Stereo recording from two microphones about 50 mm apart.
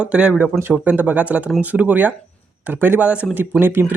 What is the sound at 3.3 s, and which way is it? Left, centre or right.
Speech, right.